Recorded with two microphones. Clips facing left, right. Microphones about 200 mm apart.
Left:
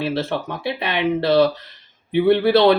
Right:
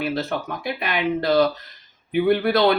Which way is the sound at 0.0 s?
30° left (ahead or behind).